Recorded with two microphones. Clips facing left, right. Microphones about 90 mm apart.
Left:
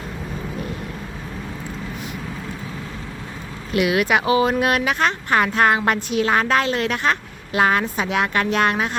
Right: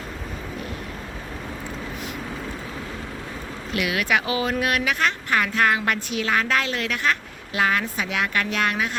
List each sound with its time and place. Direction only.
3.8 s speech: 20° left (ahead or behind)